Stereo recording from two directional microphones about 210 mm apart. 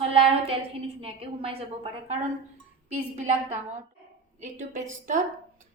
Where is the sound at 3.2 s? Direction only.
35° right (ahead or behind).